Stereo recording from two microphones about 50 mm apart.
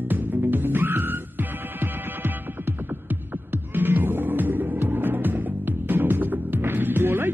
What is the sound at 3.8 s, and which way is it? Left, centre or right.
Music, right.